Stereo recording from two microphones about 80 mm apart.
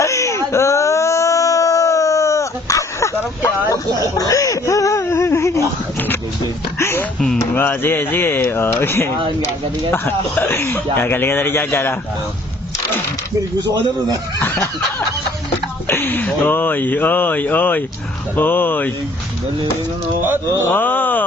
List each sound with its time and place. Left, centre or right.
0.0 s a sound: left
4.2 s speech: left
6.7 s speech: left
15.9 s speech: left
20.2 s speech: right
20.6 s speech: left